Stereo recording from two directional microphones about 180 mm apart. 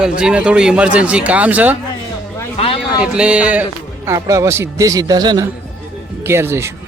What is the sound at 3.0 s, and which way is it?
Speech, 5° right (ahead or behind).